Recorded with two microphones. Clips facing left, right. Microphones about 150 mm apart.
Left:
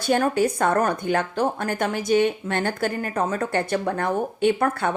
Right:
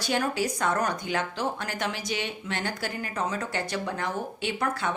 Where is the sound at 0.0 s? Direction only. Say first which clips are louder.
Left 7 dB; 50° left (ahead or behind).